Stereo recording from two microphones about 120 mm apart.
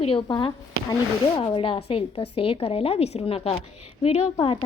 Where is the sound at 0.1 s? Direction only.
45° left (ahead or behind).